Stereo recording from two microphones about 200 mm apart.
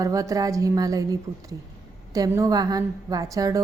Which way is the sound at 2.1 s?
15° right (ahead or behind).